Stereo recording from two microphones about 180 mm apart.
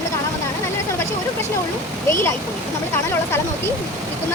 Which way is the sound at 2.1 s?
15° left (ahead or behind).